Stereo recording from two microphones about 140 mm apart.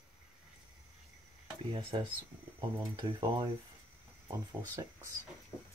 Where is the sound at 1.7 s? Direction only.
35° right (ahead or behind).